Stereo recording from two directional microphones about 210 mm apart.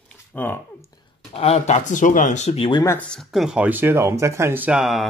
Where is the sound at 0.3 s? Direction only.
5° left (ahead or behind).